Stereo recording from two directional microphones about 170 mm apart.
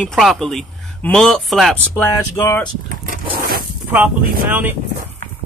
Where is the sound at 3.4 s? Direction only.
60° right (ahead or behind).